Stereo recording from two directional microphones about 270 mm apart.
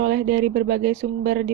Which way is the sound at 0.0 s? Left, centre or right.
Right.